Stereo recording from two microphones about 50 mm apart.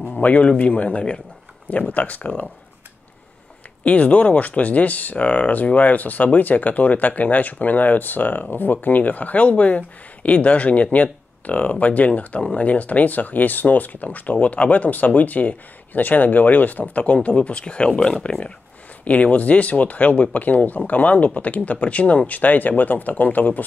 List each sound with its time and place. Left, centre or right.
0.2 s speech: left
3.8 s speech: left
19.0 s speech: left